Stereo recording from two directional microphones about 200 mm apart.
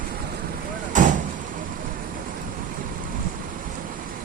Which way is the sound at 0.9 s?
40° right (ahead or behind).